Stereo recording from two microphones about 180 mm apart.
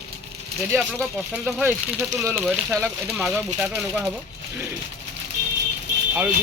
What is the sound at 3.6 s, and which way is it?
Speech, 5° right (ahead or behind).